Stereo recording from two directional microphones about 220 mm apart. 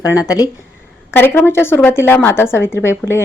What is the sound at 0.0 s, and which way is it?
Speech, 15° left (ahead or behind).